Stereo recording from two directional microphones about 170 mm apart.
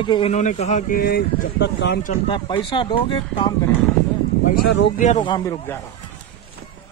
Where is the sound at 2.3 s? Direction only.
30° left (ahead or behind).